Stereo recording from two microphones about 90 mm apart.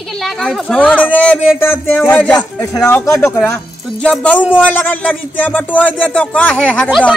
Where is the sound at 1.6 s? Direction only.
25° left (ahead or behind).